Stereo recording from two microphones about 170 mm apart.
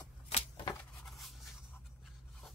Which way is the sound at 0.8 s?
Centre (ahead or behind).